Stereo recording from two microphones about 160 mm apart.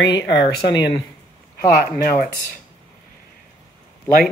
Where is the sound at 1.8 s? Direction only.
70° left (ahead or behind).